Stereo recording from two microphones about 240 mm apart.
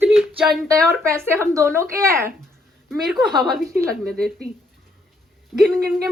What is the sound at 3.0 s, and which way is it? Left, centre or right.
Speech, centre.